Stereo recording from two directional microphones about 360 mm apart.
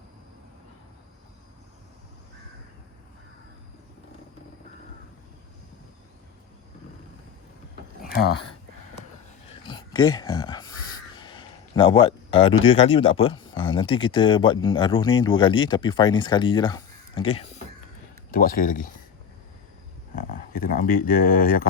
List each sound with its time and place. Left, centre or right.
8.0 s a sound: left
9.5 s speech: centre
20.1 s speech: left